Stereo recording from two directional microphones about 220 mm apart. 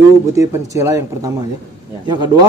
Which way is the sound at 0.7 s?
15° right (ahead or behind).